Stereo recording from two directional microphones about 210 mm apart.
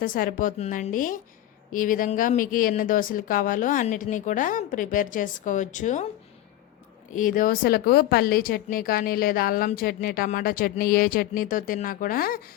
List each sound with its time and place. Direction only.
0.0 s speech: 40° left (ahead or behind)
7.1 s speech: 40° left (ahead or behind)